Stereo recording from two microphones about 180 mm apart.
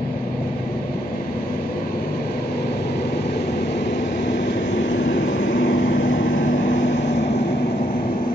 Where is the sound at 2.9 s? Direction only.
65° left (ahead or behind).